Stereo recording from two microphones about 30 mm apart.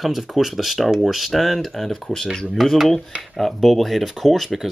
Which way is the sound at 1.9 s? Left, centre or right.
Centre.